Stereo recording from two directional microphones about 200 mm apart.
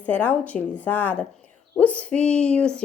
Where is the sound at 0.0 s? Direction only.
10° left (ahead or behind).